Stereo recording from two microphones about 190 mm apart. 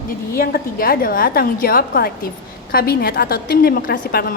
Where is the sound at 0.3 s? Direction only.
50° left (ahead or behind).